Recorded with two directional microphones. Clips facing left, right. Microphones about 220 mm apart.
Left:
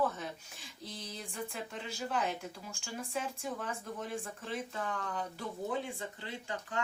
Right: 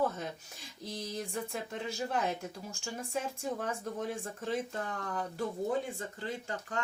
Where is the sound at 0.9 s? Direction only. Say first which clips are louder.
Right 7 dB; 40° right (ahead or behind).